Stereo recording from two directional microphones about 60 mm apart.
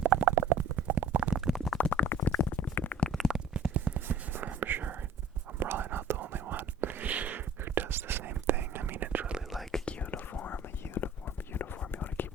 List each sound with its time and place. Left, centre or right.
0.0 s stomach rumble: right
0.3 s stomach rumble: right
0.8 s stomach rumble: right
1.5 s a sound: centre
1.8 s a sound: left
3.1 s a sound: centre
3.8 s whispering: right
9.5 s whispering: centre
9.8 s whispering: centre
10.8 s whispering: left